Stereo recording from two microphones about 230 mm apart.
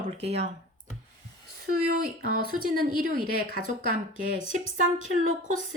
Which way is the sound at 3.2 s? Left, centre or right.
Left.